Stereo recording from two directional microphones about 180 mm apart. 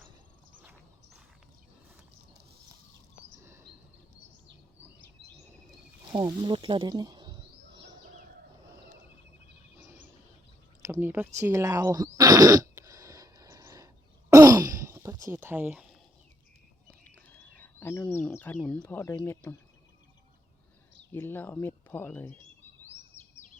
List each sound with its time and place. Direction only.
0.6 s horse: 10° right (ahead or behind)
3.3 s a sound: 15° right (ahead or behind)
6.1 s speech: 25° right (ahead or behind)
10.8 s throat clearing: 15° right (ahead or behind)
15.3 s speech: 10° right (ahead or behind)
17.0 s a sound: 10° left (ahead or behind)
21.1 s speech: 10° left (ahead or behind)